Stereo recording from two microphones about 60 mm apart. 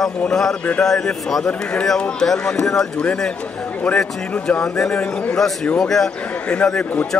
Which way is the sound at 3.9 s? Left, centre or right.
Centre.